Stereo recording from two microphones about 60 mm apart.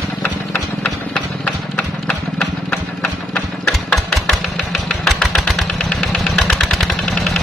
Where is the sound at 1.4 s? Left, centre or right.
Centre.